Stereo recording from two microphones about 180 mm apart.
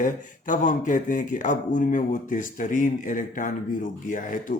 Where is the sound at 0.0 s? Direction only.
45° left (ahead or behind).